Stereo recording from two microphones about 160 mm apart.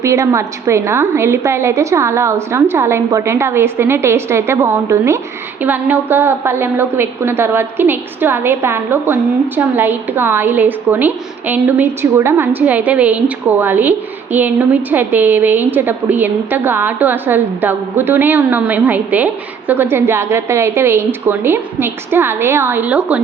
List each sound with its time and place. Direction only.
0.0 s a woman's voice: 20° right (ahead or behind)